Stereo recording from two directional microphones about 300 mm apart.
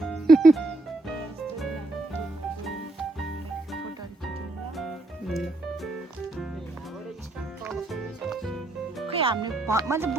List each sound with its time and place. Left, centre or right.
0.0 s music: centre
2.6 s music: centre
4.8 s music: centre
7.6 s music: centre
9.0 s music: centre
9.6 s speech: centre